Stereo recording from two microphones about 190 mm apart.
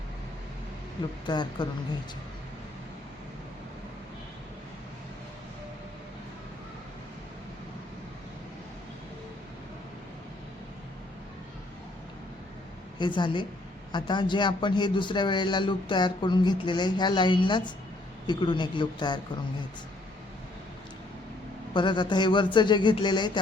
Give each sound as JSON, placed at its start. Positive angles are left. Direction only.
{"t": 1.3, "sound": "a man's voice", "side_deg": 25}
{"t": 13.0, "sound": "a man's voice", "side_deg": 25}
{"t": 21.7, "sound": "a man's voice", "side_deg": 25}